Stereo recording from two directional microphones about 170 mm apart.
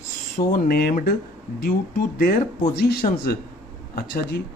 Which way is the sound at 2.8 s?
65° left (ahead or behind).